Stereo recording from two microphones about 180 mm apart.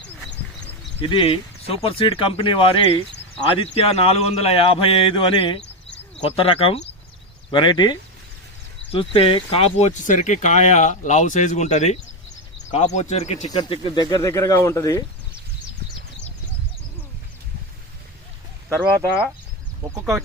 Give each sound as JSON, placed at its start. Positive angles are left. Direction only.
{"t": 1.0, "sound": "speech", "side_deg": 30}
{"t": 13.5, "sound": "speech", "side_deg": 25}
{"t": 19.9, "sound": "speech", "side_deg": -15}